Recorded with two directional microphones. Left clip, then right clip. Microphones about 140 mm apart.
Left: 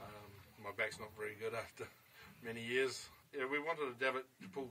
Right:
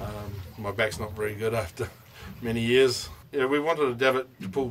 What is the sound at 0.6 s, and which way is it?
Speech, 20° right (ahead or behind).